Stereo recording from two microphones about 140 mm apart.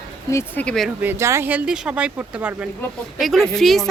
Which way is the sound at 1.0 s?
20° right (ahead or behind).